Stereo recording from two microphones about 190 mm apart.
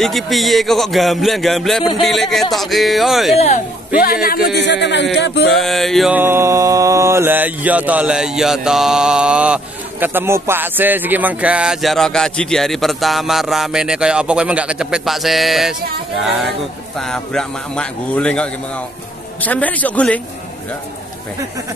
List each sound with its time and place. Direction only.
0.0 s mantra: centre (ahead or behind)
3.3 s a man's voice: 35° left (ahead or behind)
3.9 s a man's voice: 50° left (ahead or behind)
4.6 s a man's voice: 65° left (ahead or behind)
5.1 s a sound: 65° left (ahead or behind)
5.5 s mantra: centre (ahead or behind)
6.1 s mantra: 15° right (ahead or behind); by 18.5 s 5° left (ahead or behind)
19.4 s a man's voice: 10° left (ahead or behind)